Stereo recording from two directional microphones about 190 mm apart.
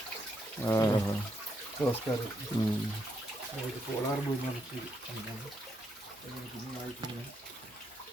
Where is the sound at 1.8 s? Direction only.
Centre (ahead or behind).